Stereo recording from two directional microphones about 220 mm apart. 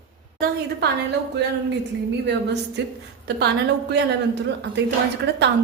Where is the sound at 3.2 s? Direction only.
50° right (ahead or behind).